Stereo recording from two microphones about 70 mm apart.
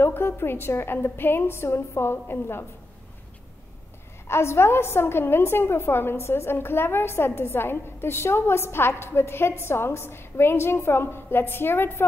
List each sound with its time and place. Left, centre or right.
0.0 s a woman's voice: left
4.3 s a woman's voice: left